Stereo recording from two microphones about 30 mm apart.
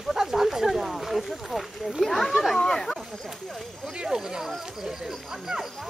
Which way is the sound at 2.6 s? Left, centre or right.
Centre.